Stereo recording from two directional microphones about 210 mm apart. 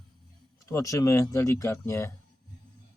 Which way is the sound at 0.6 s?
15° left (ahead or behind).